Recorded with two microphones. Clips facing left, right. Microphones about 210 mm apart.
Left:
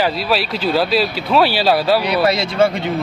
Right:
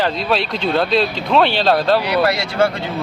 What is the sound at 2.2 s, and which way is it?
Speech, 20° left (ahead or behind).